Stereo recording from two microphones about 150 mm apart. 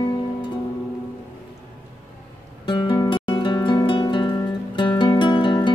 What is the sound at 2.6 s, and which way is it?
Music, 30° left (ahead or behind).